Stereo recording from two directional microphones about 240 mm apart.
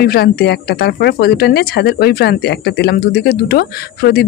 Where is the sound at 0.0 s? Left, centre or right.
Left.